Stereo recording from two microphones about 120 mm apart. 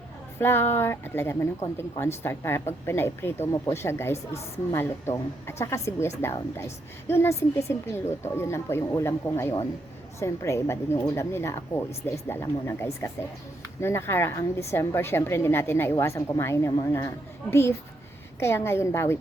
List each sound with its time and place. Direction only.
0.3 s speech: 20° left (ahead or behind)